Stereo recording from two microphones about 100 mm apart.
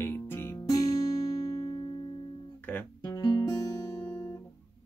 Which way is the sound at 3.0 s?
40° left (ahead or behind).